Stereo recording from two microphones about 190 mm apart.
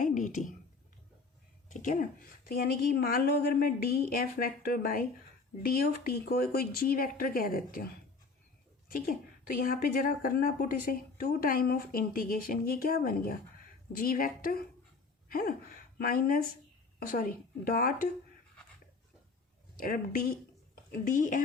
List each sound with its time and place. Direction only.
0.0 s a sound: 45° left (ahead or behind)
1.7 s speech: 40° left (ahead or behind)
2.5 s a woman's voice: 55° left (ahead or behind)
8.9 s a woman's voice: 50° left (ahead or behind)
19.8 s a woman's voice: 50° left (ahead or behind)